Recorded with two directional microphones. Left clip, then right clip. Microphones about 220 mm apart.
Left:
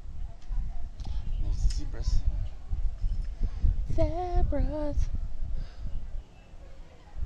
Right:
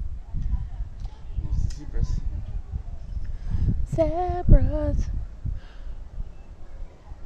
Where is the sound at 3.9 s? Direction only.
Centre (ahead or behind).